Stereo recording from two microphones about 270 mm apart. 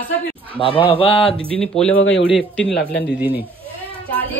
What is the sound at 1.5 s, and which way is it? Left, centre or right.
A woman's voice, centre.